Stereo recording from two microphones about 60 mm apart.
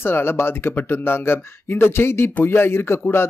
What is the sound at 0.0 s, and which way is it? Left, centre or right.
Speech, left.